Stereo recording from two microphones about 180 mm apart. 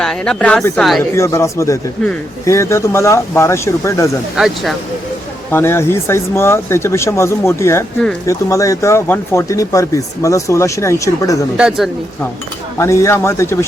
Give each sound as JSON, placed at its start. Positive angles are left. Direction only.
{"t": 0.0, "sound": "speech", "side_deg": 5}
{"t": 1.1, "sound": "speech", "side_deg": 15}
{"t": 4.4, "sound": "speech", "side_deg": 0}
{"t": 5.5, "sound": "speech", "side_deg": 15}
{"t": 11.5, "sound": "speech", "side_deg": -5}
{"t": 12.8, "sound": "speech", "side_deg": 15}